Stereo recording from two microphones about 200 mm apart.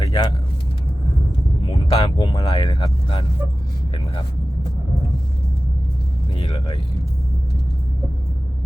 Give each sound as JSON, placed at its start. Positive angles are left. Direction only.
{"t": 0.0, "sound": "vehicle", "side_deg": 20}
{"t": 1.9, "sound": "speech", "side_deg": 25}
{"t": 6.3, "sound": "speech", "side_deg": 25}